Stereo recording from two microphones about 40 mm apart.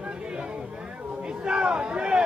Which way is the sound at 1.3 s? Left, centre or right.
Right.